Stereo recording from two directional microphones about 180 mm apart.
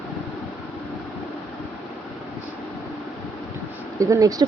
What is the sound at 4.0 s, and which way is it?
Speech, 20° right (ahead or behind).